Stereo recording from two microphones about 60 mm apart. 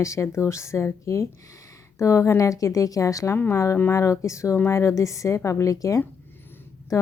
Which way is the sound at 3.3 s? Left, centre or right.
Left.